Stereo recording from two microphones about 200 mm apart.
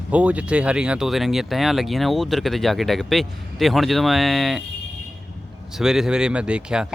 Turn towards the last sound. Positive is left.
turn(degrees=-5)  # may be behind; listen again after turning